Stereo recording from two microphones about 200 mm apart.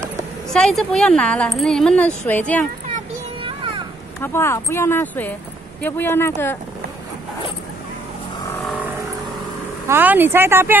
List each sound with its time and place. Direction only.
0.5 s speech: centre (ahead or behind)
3.4 s a sound: 25° right (ahead or behind)
4.2 s speech: 10° left (ahead or behind)
9.8 s speech: 10° right (ahead or behind)